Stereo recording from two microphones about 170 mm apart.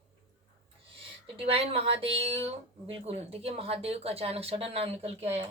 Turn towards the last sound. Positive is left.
turn(degrees=-35)  # may be behind; listen again after turning